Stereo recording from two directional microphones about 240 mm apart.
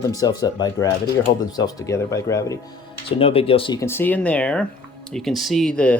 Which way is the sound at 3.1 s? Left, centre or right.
Left.